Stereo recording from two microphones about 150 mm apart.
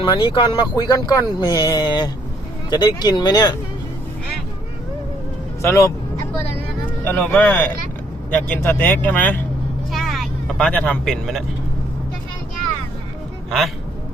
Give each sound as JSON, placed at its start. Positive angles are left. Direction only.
{"t": 0.0, "sound": "speech", "side_deg": 35}
{"t": 5.6, "sound": "speech", "side_deg": 20}
{"t": 7.0, "sound": "speech", "side_deg": 10}
{"t": 9.9, "sound": "vehicle", "side_deg": 0}
{"t": 10.7, "sound": "a man's voice", "side_deg": 5}